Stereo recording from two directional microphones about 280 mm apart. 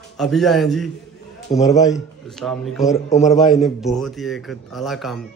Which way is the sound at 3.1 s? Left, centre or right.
Left.